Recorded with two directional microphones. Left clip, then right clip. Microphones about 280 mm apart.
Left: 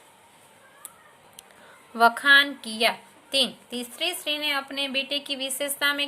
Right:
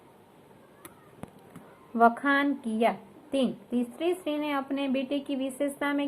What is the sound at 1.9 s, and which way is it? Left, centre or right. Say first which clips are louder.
A woman's voice: left 6 dB; left.